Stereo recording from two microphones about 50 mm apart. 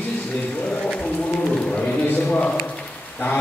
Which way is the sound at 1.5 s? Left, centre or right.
Left.